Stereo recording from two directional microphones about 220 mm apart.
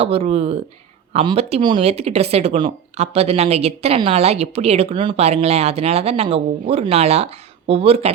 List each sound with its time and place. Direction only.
0.0 s speech: 25° right (ahead or behind)